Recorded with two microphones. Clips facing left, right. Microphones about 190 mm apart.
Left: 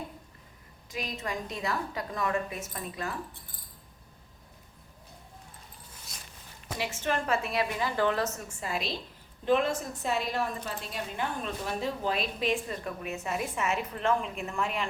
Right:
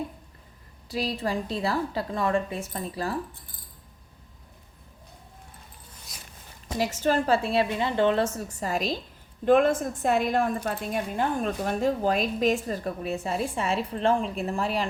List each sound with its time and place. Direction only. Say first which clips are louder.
0.9 s a woman's voice: right 7 dB; 35° right (ahead or behind)
6.7 s a woman's voice: right 7 dB; 40° right (ahead or behind)